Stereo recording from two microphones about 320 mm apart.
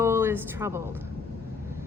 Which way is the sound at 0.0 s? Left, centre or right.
Centre.